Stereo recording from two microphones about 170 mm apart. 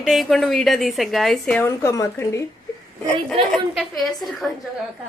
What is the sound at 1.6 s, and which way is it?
Speech, 15° left (ahead or behind).